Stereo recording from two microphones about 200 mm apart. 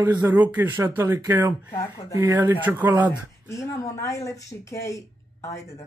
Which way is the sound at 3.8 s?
15° left (ahead or behind).